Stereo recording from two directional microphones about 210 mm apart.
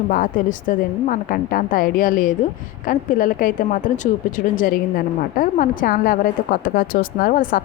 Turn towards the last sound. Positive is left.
turn(degrees=40)  # may be behind; listen again after turning